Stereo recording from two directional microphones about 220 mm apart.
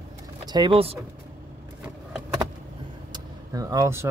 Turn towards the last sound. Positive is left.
turn(degrees=-15)  # may be behind; listen again after turning